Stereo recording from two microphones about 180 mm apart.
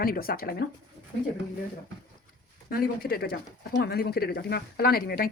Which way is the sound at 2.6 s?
55° left (ahead or behind).